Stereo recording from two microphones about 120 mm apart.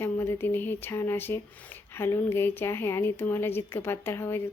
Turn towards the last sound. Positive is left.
turn(degrees=20)  # may be behind; listen again after turning